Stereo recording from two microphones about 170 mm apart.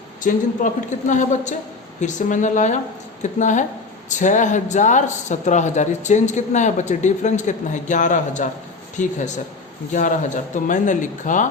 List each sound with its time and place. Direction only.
0.2 s speech: 50° left (ahead or behind)